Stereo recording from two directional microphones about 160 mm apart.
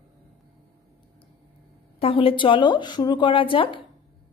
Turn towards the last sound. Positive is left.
turn(degrees=35)  # may be behind; listen again after turning